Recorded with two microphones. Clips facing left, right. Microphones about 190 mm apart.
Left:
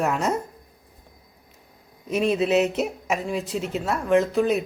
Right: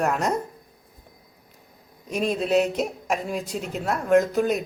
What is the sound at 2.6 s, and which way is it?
A woman's voice, 5° left (ahead or behind).